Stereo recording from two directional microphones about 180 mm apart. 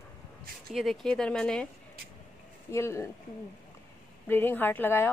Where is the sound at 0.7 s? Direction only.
Centre (ahead or behind).